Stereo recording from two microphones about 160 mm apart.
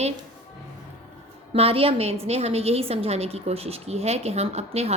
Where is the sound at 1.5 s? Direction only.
35° right (ahead or behind).